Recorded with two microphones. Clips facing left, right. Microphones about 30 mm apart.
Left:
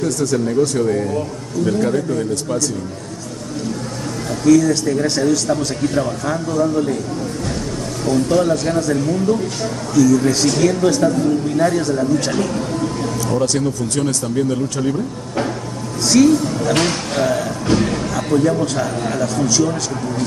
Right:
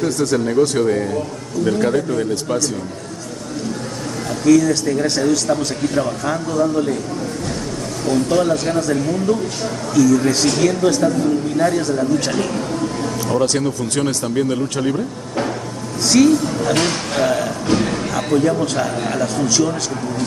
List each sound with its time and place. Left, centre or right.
0.0 s speech: right
1.7 s speech: centre
4.3 s a man's voice: centre
8.1 s a man's voice: centre
13.3 s speech: right
16.1 s a man's voice: centre
17.2 s a man's voice: centre